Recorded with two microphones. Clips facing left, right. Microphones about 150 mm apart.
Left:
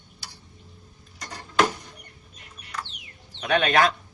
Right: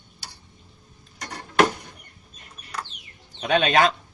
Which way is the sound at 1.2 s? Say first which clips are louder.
Right 3 dB; 60° right (ahead or behind).